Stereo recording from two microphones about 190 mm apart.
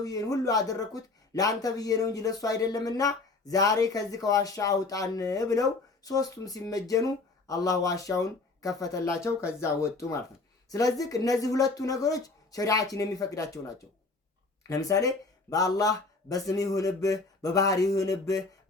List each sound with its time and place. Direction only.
0.0 s speech: 20° left (ahead or behind)
14.7 s speech: 20° left (ahead or behind)